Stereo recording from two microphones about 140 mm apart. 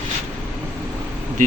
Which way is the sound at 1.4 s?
65° right (ahead or behind).